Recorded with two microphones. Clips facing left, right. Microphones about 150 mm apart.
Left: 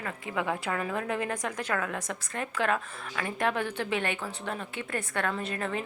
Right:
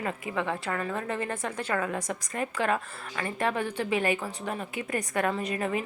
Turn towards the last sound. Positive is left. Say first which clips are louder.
# right 3 dB
turn(degrees=-5)  # may be behind; listen again after turning